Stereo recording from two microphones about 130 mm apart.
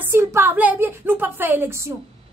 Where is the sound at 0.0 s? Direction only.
20° right (ahead or behind).